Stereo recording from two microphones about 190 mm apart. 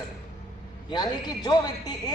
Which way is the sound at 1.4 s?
20° left (ahead or behind).